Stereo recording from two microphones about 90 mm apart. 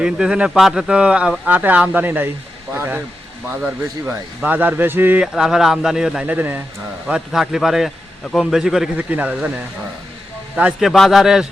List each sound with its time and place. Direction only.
0.0 s speech: 10° right (ahead or behind)
4.4 s speech: 20° right (ahead or behind)
5.2 s speech: 5° right (ahead or behind)
6.2 s speech: 20° right (ahead or behind)
7.1 s a man's voice: 5° right (ahead or behind)
8.4 s speech: 5° right (ahead or behind)
10.5 s a man's voice: 15° right (ahead or behind)
10.8 s speech: centre (ahead or behind)